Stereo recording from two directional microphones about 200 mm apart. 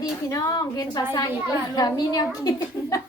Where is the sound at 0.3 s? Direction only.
15° left (ahead or behind).